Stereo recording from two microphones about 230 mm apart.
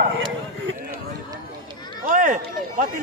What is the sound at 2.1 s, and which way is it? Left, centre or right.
Run, right.